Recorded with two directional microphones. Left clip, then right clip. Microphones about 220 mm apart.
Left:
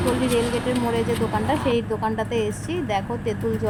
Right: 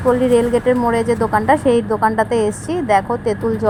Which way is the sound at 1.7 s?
20° right (ahead or behind).